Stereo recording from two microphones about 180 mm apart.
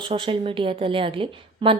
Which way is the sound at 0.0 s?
30° right (ahead or behind).